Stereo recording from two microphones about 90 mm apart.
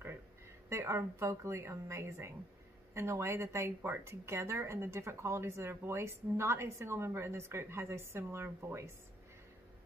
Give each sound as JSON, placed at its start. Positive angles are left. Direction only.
{"t": 0.7, "sound": "speech", "side_deg": -30}